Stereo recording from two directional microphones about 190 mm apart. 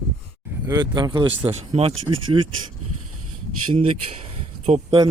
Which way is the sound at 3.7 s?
30° right (ahead or behind).